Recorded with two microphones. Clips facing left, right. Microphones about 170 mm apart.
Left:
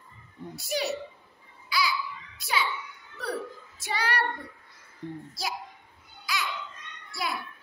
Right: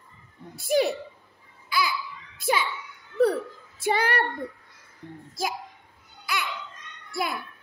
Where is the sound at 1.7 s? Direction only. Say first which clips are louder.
Right 1 dB; 50° right (ahead or behind).